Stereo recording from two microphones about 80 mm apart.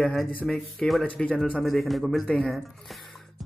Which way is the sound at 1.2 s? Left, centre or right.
Centre.